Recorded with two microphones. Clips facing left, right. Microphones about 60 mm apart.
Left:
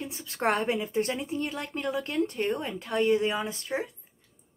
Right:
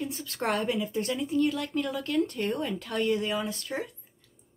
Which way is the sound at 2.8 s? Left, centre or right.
Left.